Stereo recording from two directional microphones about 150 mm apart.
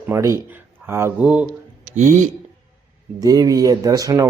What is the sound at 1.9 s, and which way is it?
Speech, 55° right (ahead or behind).